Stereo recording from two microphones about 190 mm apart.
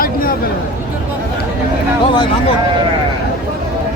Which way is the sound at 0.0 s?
50° left (ahead or behind).